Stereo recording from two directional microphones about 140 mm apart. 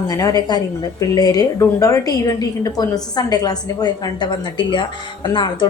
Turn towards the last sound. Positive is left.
turn(degrees=30)  # may be behind; listen again after turning